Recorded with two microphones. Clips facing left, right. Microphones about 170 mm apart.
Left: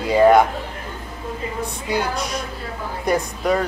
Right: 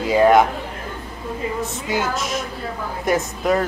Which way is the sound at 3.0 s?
Centre (ahead or behind).